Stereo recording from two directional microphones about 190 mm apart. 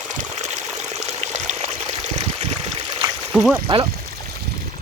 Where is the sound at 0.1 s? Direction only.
40° right (ahead or behind).